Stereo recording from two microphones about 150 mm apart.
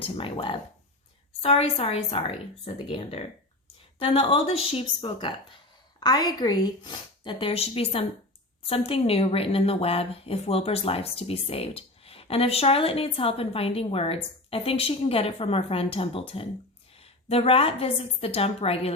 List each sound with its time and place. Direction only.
0.0 s a woman's voice: 35° left (ahead or behind)